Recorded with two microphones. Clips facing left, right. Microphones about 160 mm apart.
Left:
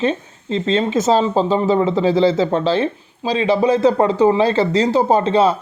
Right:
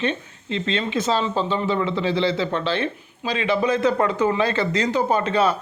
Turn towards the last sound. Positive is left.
turn(degrees=30)  # may be behind; listen again after turning